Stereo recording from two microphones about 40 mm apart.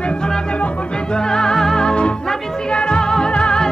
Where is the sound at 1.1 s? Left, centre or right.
Centre.